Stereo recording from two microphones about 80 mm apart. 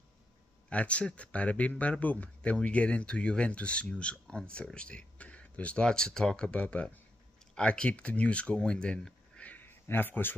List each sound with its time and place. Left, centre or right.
0.7 s speech: centre